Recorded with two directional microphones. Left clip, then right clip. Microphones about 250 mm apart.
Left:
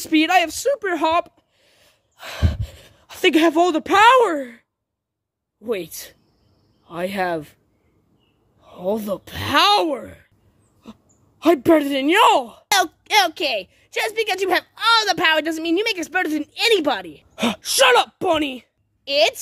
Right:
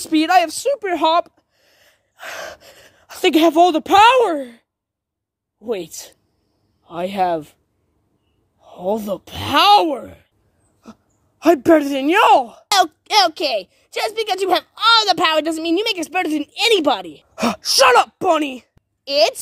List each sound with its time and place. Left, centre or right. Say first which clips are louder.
0.0 s a woman's voice: right 2 dB; centre
8.5 s a woman's voice: right 2 dB; centre